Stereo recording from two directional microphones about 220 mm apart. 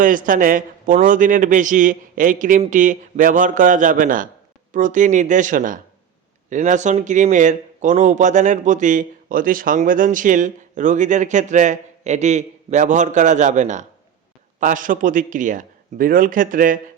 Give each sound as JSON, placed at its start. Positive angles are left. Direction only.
{"t": 0.0, "sound": "speech", "side_deg": -35}